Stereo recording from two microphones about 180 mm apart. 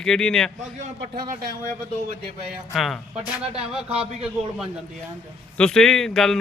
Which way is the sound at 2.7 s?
Centre (ahead or behind).